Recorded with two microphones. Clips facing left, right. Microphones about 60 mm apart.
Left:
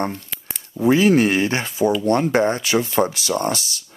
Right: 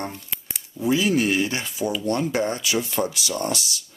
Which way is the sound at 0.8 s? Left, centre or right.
Left.